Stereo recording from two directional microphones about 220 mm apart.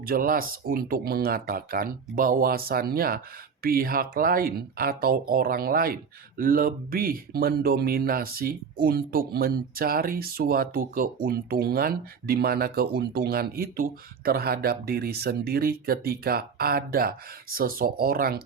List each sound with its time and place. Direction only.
0.0 s speech: 40° right (ahead or behind)